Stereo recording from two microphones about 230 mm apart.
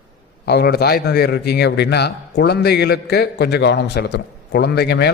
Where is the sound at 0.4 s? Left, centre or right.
Left.